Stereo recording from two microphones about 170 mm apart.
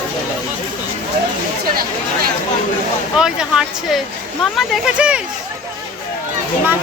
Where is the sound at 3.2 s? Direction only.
5° right (ahead or behind).